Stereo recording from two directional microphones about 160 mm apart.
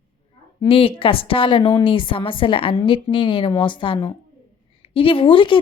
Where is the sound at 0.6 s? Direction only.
35° left (ahead or behind).